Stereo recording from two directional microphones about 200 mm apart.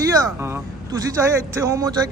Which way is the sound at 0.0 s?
15° right (ahead or behind).